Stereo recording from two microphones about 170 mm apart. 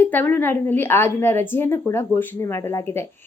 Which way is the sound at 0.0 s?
10° left (ahead or behind).